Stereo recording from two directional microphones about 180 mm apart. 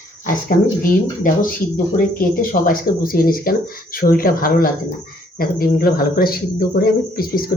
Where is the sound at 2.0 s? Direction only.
55° left (ahead or behind).